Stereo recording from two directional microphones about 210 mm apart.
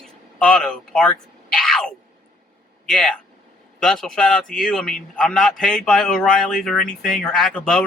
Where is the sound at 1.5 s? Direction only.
Centre (ahead or behind).